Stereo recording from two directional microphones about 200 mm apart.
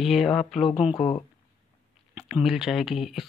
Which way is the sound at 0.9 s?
30° left (ahead or behind).